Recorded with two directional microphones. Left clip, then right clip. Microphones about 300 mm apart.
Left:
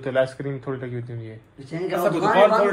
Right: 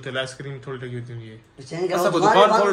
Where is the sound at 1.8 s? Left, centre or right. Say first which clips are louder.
Right 3 dB; centre.